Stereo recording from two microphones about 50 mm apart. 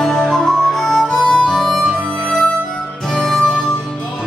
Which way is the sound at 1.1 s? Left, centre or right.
Centre.